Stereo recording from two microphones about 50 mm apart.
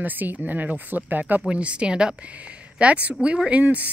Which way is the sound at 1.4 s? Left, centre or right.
Right.